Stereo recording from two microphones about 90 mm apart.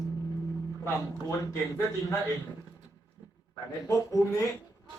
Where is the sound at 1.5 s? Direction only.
35° left (ahead or behind).